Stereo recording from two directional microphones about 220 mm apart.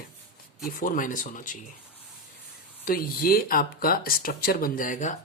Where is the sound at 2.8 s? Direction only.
40° left (ahead or behind).